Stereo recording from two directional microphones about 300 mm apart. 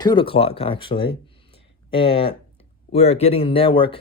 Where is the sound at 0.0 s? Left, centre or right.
Centre.